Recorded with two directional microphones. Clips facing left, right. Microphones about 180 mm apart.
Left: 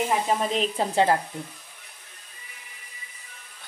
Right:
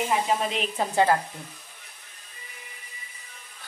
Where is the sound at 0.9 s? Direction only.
25° left (ahead or behind).